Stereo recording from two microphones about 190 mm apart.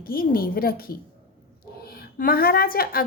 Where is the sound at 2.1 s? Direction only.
50° left (ahead or behind).